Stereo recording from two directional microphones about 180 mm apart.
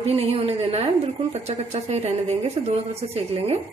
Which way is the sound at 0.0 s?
35° right (ahead or behind).